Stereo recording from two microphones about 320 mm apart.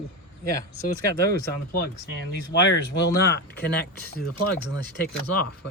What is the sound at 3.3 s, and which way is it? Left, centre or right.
Speech, left.